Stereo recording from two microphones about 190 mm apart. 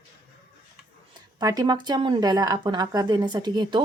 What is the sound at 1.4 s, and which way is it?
Speech, 20° right (ahead or behind).